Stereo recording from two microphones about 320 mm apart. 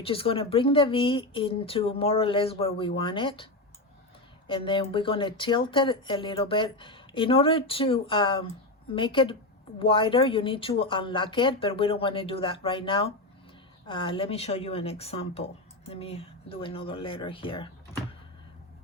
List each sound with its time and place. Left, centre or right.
0.0 s speech: centre